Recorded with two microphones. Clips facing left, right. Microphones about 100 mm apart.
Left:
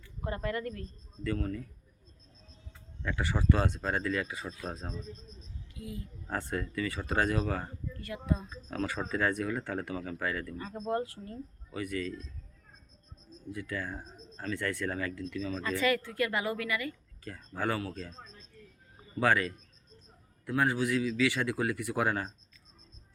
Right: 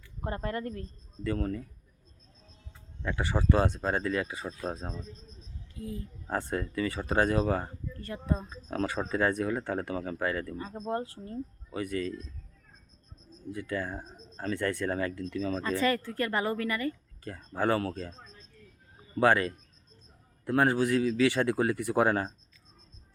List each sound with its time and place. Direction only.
0.3 s speech: 35° right (ahead or behind)
3.0 s speech: 20° right (ahead or behind)
5.7 s speech: 35° right (ahead or behind)
6.2 s speech: 20° right (ahead or behind)
13.5 s speech: 25° right (ahead or behind)
17.2 s speech: 25° right (ahead or behind)
19.2 s speech: 25° right (ahead or behind)